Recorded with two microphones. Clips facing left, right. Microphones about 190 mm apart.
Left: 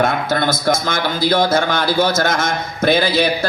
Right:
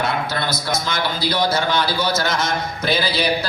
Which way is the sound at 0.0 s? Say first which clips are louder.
Left 6 dB; 50° left (ahead or behind).